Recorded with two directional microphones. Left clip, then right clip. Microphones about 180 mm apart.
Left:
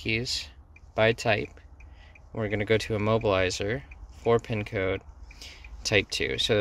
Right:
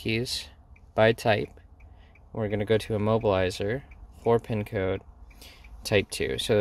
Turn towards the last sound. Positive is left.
turn(degrees=-30)  # may be behind; listen again after turning